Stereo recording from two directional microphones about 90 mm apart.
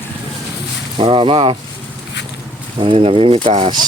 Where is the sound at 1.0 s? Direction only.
70° right (ahead or behind).